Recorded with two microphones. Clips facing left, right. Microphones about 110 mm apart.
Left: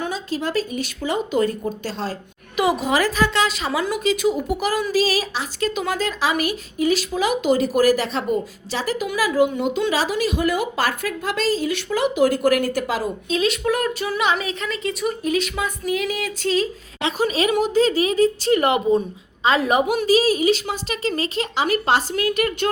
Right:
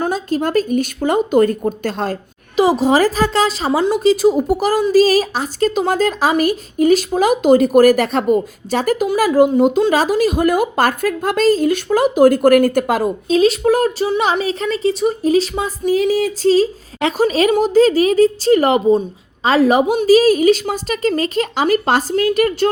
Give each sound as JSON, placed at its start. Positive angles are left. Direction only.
{"t": 0.0, "sound": "a woman's voice", "side_deg": -50}
{"t": 2.6, "sound": "a woman's voice", "side_deg": -30}
{"t": 13.2, "sound": "a woman's voice", "side_deg": -35}
{"t": 20.1, "sound": "a woman's voice", "side_deg": -45}